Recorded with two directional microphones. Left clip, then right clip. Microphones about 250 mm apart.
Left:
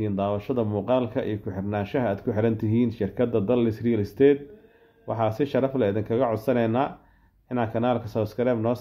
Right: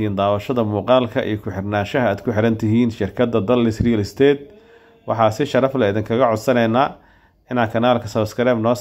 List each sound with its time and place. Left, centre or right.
0.0 s speech: centre